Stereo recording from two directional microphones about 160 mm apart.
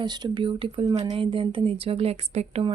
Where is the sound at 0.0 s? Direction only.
25° right (ahead or behind).